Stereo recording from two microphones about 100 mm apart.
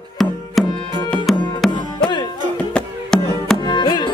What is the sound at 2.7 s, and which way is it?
Music, 5° left (ahead or behind).